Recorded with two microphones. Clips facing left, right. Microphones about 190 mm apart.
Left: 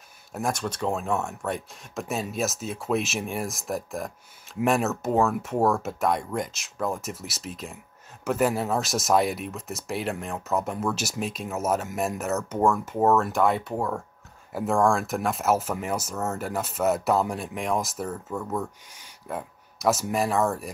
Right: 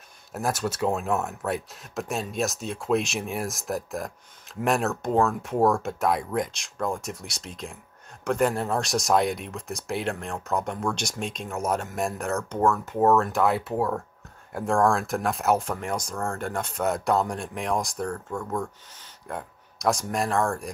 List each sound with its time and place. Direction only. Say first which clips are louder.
0.3 s speech: right 1 dB; 5° right (ahead or behind)